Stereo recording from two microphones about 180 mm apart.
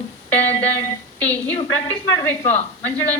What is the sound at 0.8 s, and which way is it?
A woman's voice, 10° left (ahead or behind).